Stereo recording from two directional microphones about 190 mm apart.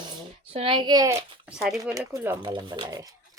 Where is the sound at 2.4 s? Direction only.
25° right (ahead or behind).